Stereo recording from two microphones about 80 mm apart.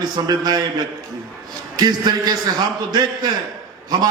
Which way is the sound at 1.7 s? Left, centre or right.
Right.